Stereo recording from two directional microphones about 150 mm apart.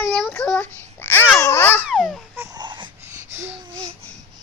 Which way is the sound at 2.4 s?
25° right (ahead or behind).